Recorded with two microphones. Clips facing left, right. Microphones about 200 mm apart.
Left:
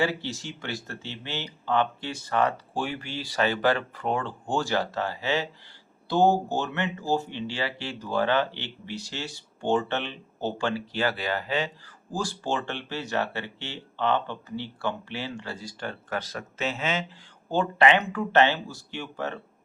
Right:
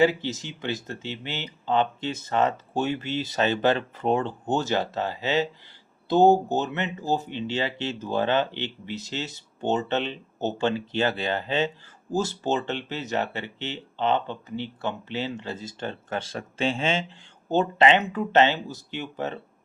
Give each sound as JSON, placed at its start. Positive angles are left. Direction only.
{"t": 0.0, "sound": "speech", "side_deg": -20}